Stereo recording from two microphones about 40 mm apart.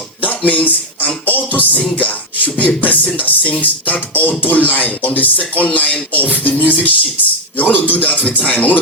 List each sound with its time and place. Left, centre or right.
0.2 s music: left
2.0 s speech: left